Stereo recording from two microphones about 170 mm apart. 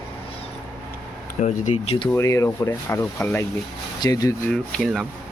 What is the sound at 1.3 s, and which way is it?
Speech, 45° left (ahead or behind).